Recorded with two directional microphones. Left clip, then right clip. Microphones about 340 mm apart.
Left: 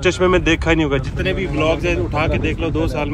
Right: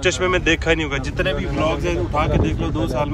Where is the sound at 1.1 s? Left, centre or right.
Right.